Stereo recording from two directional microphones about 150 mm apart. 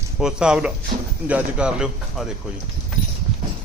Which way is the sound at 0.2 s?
5° right (ahead or behind).